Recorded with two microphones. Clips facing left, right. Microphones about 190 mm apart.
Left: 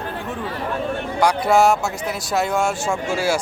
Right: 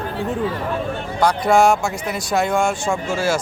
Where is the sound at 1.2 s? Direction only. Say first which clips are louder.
Right 1 dB; 10° left (ahead or behind).